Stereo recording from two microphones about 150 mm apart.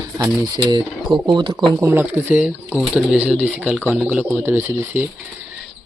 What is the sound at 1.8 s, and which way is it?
Speech, 15° right (ahead or behind).